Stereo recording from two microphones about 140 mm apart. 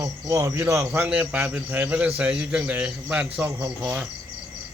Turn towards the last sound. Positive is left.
turn(degrees=-10)  # may be behind; listen again after turning